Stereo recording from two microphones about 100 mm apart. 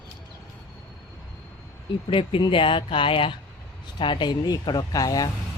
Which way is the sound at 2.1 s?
60° left (ahead or behind).